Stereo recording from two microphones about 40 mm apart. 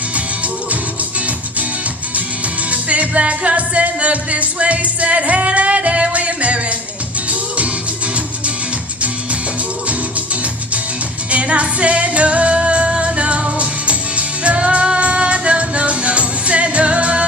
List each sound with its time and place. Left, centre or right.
2.6 s music: right
11.3 s music: right